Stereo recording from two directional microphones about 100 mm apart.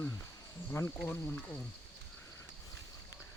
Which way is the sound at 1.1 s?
15° left (ahead or behind).